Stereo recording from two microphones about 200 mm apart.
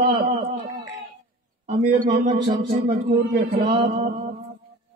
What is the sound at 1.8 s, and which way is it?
Speech, 40° right (ahead or behind).